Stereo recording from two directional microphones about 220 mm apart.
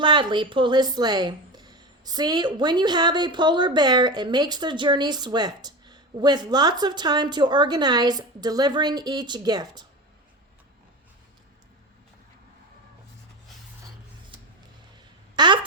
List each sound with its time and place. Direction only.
0.0 s a woman's voice: 20° right (ahead or behind)
15.4 s speech: 20° right (ahead or behind)